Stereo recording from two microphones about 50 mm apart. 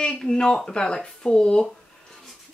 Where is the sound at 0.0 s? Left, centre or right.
Centre.